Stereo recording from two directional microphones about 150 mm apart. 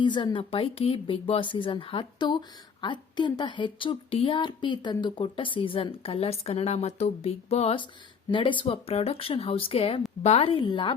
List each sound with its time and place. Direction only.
0.0 s speech: 30° left (ahead or behind)